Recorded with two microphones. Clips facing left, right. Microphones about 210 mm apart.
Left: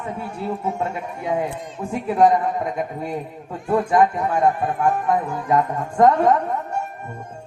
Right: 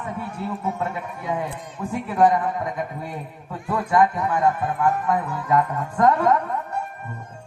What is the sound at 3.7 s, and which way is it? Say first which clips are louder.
A woman's voice: left 3 dB; 30° left (ahead or behind).